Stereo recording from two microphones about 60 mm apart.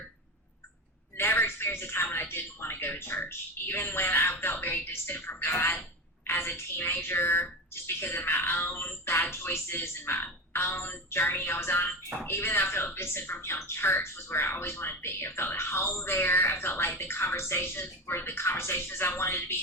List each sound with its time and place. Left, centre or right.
1.1 s speech: left